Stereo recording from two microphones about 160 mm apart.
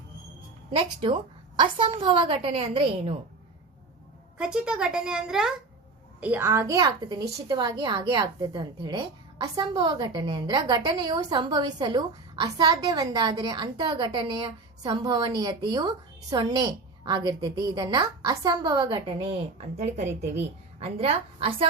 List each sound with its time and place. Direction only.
1.6 s a woman's voice: 30° right (ahead or behind)
4.4 s a woman's voice: 5° right (ahead or behind); by 21.7 s 35° right (ahead or behind)